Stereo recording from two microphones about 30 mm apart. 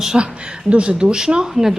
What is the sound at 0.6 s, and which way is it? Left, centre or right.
Speech, right.